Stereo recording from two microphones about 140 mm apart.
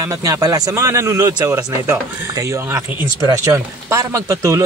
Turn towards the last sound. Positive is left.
turn(degrees=-25)  # may be behind; listen again after turning